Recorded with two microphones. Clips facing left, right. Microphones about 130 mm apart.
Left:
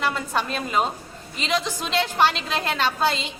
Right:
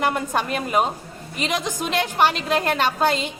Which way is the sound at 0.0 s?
50° right (ahead or behind).